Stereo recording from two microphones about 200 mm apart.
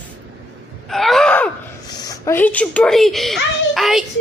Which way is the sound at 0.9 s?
Centre (ahead or behind).